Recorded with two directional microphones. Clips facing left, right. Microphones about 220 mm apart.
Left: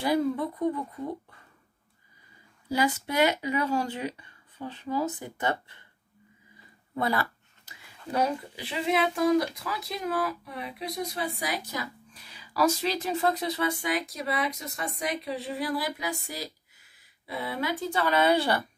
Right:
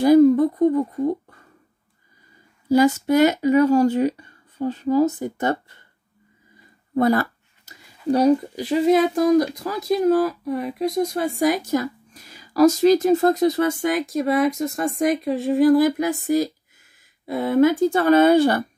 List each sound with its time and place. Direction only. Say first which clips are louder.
0.0 s speech: right 13 dB; 45° right (ahead or behind)
2.7 s speech: right 11 dB; 45° right (ahead or behind)
7.0 s a sound: right 10 dB; 45° right (ahead or behind)
8.1 s speech: right 11 dB; 40° right (ahead or behind)